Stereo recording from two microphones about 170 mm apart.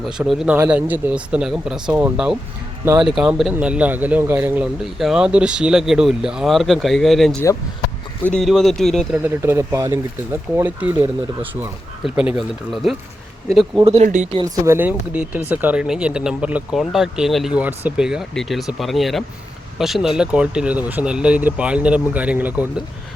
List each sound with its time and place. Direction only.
0.0 s speech: centre (ahead or behind)
8.4 s speech: centre (ahead or behind)
9.1 s speech: 15° right (ahead or behind)
13.8 s speech: 35° right (ahead or behind)
14.4 s speech: 20° right (ahead or behind)